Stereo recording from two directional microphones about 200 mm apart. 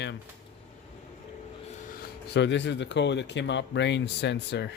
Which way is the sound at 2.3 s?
60° left (ahead or behind).